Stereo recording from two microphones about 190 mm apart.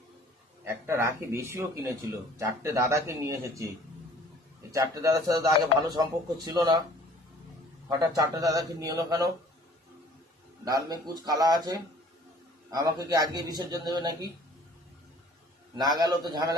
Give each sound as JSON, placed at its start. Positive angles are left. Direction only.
{"t": 0.6, "sound": "a man's voice", "side_deg": -15}
{"t": 4.7, "sound": "a man's voice", "side_deg": -15}
{"t": 7.9, "sound": "a man's voice", "side_deg": -20}
{"t": 10.7, "sound": "a man's voice", "side_deg": -20}
{"t": 15.8, "sound": "a man's voice", "side_deg": -20}